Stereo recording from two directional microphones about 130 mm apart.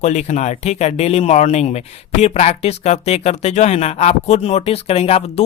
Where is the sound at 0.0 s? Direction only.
65° left (ahead or behind).